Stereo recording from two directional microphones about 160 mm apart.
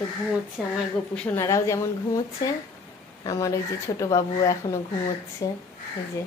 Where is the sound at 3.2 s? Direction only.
20° left (ahead or behind).